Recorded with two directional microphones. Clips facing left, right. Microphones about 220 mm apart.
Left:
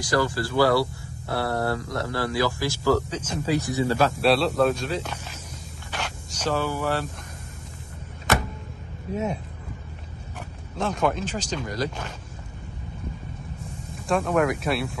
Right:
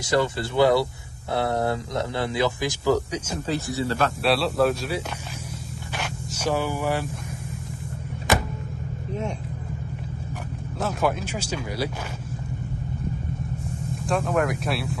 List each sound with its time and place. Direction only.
0.0 s speech: 25° right (ahead or behind)
3.4 s speech: 15° left (ahead or behind)
4.2 s speech: centre (ahead or behind)
5.9 s a sound: 10° right (ahead or behind)
9.1 s speech: 5° left (ahead or behind)
10.8 s speech: 5° right (ahead or behind)
13.9 s speech: centre (ahead or behind)